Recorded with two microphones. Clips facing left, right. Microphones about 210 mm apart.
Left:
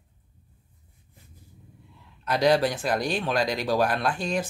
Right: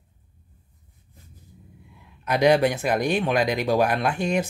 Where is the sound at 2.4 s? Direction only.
10° right (ahead or behind).